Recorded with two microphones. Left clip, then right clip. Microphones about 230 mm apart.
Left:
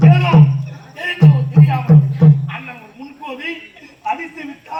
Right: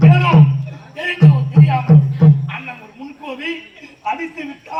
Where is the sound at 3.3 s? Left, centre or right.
Right.